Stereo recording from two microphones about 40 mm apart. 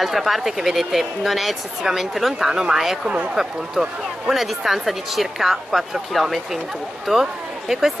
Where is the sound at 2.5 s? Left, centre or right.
Centre.